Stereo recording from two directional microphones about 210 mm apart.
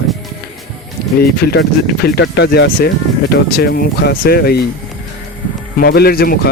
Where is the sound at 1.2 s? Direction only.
50° left (ahead or behind).